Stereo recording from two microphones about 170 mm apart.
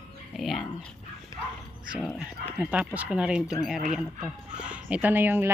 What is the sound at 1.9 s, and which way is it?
Speech, centre (ahead or behind).